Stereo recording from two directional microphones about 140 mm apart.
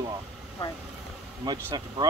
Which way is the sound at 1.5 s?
30° right (ahead or behind).